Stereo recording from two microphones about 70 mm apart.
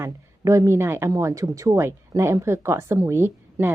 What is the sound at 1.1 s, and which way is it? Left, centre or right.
Speech, right.